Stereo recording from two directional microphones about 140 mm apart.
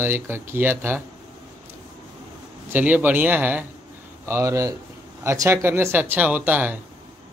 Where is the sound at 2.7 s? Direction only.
10° right (ahead or behind).